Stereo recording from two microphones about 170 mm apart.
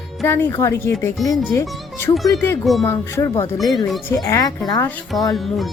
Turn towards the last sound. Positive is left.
turn(degrees=0)  # may be behind; listen again after turning